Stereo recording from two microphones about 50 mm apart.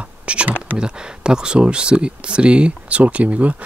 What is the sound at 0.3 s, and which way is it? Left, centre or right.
Speech, right.